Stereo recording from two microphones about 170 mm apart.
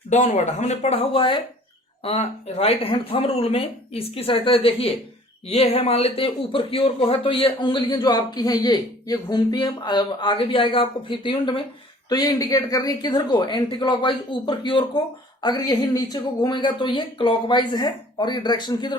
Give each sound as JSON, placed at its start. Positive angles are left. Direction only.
{"t": 0.1, "sound": "speech", "side_deg": 40}